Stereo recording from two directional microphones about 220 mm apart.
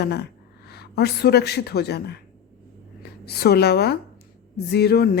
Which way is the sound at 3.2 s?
45° left (ahead or behind).